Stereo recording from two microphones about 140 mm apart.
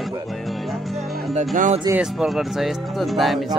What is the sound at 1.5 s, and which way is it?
Speech, 65° right (ahead or behind).